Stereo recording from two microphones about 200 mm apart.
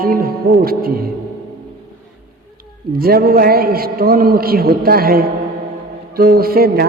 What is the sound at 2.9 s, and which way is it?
A woman's voice, 50° right (ahead or behind).